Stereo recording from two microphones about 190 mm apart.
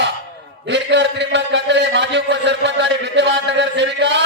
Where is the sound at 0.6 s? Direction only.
65° right (ahead or behind).